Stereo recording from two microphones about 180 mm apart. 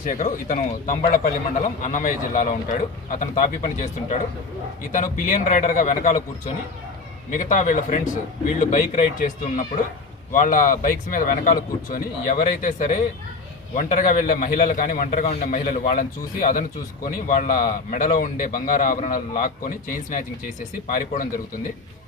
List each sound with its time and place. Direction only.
0.0 s a man's voice: 45° left (ahead or behind)
4.9 s a man's voice: 45° left (ahead or behind)
7.3 s a man's voice: 45° left (ahead or behind)